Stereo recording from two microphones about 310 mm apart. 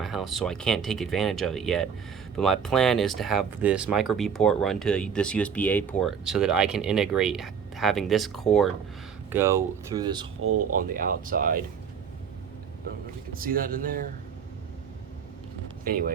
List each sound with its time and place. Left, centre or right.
0.0 s speech: centre
10.8 s speech: right
13.3 s speech: right
15.8 s speech: right